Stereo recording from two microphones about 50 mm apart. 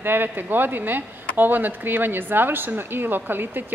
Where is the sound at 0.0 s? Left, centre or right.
Right.